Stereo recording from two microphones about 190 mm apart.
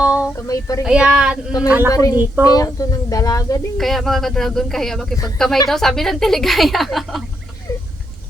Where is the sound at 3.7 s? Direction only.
Centre (ahead or behind).